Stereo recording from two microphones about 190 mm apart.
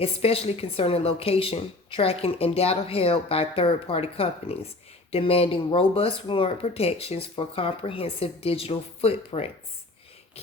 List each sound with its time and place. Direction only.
0.0 s a woman's voice: 30° left (ahead or behind)